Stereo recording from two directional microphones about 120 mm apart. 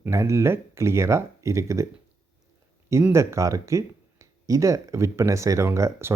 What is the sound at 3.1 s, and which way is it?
Speech, 25° right (ahead or behind).